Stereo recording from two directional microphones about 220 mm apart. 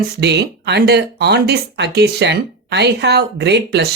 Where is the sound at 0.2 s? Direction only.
50° right (ahead or behind).